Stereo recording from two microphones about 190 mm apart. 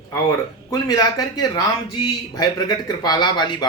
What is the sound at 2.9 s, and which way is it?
Speech, 20° left (ahead or behind).